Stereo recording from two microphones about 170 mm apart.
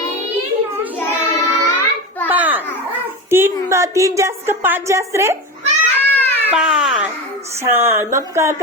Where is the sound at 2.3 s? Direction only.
10° right (ahead or behind).